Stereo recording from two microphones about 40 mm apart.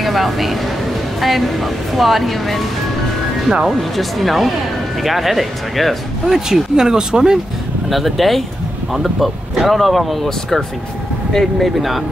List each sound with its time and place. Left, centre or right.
0.0 s speech: centre
3.6 s speech: centre
6.2 s speech: centre
7.9 s speech: centre
11.3 s speech: centre